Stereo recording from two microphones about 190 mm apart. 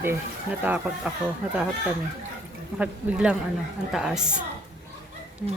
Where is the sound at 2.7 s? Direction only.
5° right (ahead or behind).